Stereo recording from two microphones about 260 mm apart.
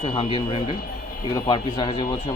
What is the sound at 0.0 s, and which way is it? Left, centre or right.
Speech, left.